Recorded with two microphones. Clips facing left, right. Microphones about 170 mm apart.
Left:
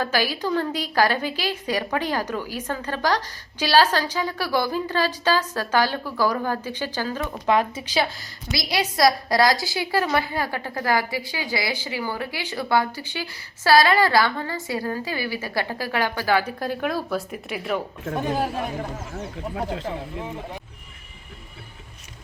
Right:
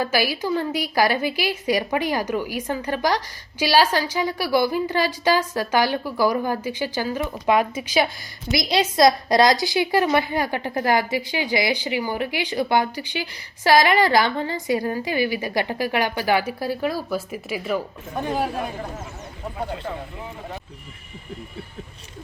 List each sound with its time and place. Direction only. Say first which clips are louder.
0.0 s a woman's voice: right 1 dB; 10° right (ahead or behind)